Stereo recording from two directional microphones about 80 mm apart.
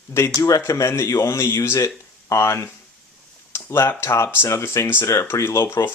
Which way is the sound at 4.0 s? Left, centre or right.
Left.